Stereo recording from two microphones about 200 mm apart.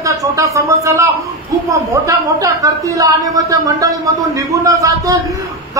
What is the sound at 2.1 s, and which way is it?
Speech, 15° right (ahead or behind).